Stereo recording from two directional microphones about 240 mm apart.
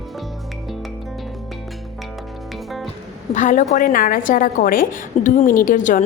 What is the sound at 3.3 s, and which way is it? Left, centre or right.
A woman's voice, left.